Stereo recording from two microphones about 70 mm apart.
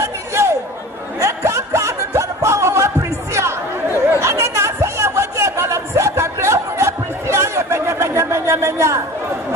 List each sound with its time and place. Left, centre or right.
0.0 s chatter: right
1.2 s music: right
3.3 s chatter: right